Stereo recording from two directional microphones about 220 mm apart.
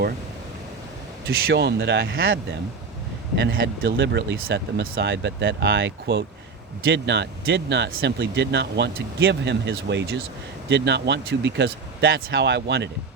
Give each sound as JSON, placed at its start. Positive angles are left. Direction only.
{"t": 1.3, "sound": "speech", "side_deg": -45}